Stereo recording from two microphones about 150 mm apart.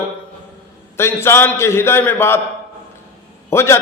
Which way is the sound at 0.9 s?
15° left (ahead or behind).